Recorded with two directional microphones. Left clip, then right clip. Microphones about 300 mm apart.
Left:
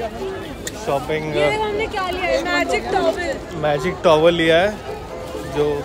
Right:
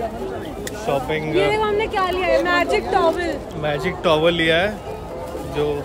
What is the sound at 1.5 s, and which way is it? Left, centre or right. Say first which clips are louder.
Speech: right 2 dB; right.